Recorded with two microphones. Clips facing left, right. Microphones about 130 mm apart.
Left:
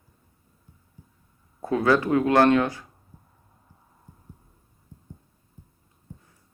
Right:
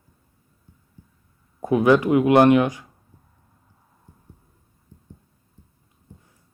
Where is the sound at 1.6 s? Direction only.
15° right (ahead or behind).